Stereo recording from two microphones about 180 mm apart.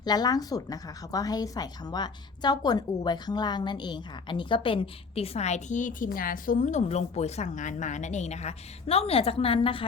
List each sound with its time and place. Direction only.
0.0 s speech: 20° left (ahead or behind)